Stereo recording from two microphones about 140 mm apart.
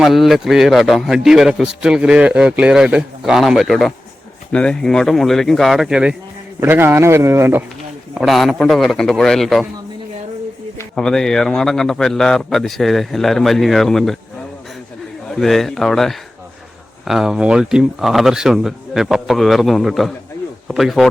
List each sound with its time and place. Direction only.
0.0 s a man's voice: centre (ahead or behind)
6.6 s a man's voice: 15° right (ahead or behind)
8.1 s a man's voice: centre (ahead or behind)
10.9 s a man's voice: 5° left (ahead or behind)
15.3 s a man's voice: centre (ahead or behind)